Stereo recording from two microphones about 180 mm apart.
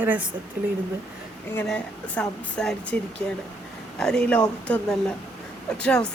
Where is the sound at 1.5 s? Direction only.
5° left (ahead or behind).